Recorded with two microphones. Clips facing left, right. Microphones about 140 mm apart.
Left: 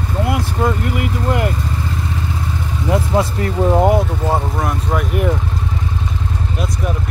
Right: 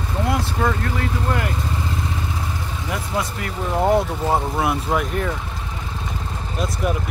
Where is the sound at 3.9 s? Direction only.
Centre (ahead or behind).